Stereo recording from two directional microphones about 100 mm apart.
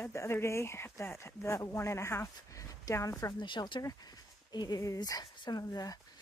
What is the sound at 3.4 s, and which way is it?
Speech, 50° left (ahead or behind).